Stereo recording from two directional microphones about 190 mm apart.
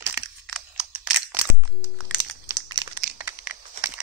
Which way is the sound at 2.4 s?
25° right (ahead or behind).